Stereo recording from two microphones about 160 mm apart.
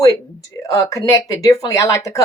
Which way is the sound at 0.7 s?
20° left (ahead or behind).